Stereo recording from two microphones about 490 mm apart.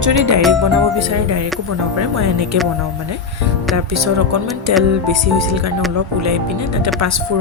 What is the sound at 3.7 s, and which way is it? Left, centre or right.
Speech, right.